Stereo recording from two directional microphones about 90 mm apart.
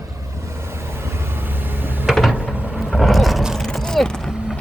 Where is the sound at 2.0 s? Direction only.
Centre (ahead or behind).